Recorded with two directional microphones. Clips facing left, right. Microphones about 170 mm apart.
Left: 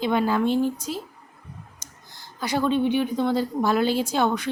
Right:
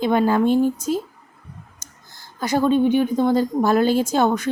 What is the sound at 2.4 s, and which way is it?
A woman's voice, 45° right (ahead or behind).